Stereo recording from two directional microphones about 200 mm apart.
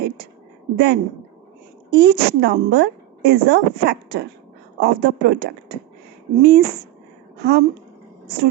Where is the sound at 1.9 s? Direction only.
55° right (ahead or behind).